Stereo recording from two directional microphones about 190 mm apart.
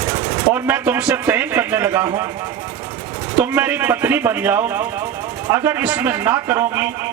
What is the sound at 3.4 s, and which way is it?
Speech, 10° right (ahead or behind).